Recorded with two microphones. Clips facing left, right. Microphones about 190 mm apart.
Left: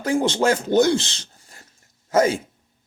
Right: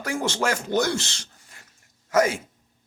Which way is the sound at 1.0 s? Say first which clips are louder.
Left 1 dB; 35° left (ahead or behind).